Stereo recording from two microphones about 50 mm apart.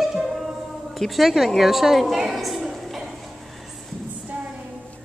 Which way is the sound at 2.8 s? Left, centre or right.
Centre.